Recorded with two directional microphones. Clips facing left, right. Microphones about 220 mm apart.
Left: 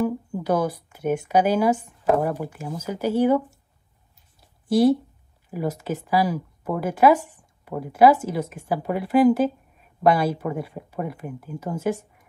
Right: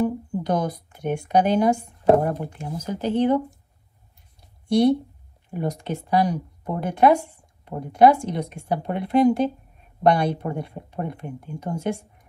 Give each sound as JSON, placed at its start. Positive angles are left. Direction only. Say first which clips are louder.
{"t": 0.4, "sound": "speech", "louder": "left 2 dB", "side_deg": 5}
{"t": 4.4, "sound": "a sound", "louder": "even", "side_deg": 5}
{"t": 5.5, "sound": "a woman's voice", "louder": "left 1 dB", "side_deg": 5}